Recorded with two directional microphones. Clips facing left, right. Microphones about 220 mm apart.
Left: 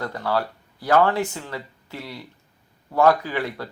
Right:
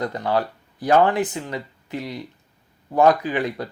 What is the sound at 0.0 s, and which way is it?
Speech, 20° right (ahead or behind).